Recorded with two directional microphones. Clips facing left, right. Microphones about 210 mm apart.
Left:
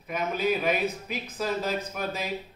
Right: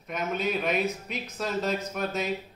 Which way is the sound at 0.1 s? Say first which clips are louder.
Left 2 dB; centre (ahead or behind).